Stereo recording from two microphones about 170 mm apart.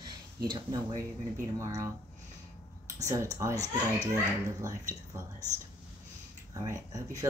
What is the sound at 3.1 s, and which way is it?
Speech, 20° right (ahead or behind).